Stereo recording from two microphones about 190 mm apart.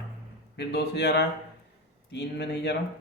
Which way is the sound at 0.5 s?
60° left (ahead or behind).